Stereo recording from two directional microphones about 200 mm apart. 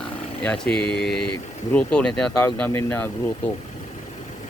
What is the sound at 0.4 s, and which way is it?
Speech, 5° left (ahead or behind).